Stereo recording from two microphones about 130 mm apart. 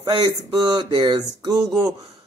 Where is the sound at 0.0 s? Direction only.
30° right (ahead or behind).